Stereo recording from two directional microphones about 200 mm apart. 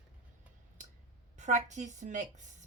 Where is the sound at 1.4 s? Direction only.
35° right (ahead or behind).